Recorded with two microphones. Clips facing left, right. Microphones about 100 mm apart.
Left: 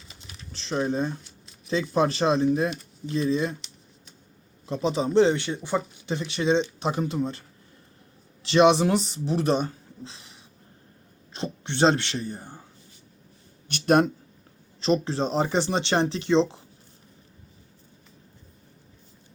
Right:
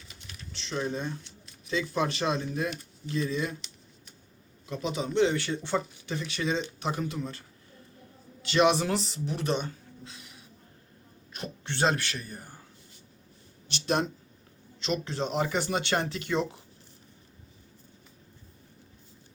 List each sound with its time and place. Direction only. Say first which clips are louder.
0.2 s speech: left 1 dB; 35° left (ahead or behind)
4.6 s speech: left 7 dB; 30° left (ahead or behind)
5.4 s speech: left 2 dB; 15° left (ahead or behind)
6.1 s speech: left 7 dB; 25° left (ahead or behind)
13.7 s speech: left 8 dB; 50° left (ahead or behind)
14.8 s speech: left 7 dB; 35° left (ahead or behind)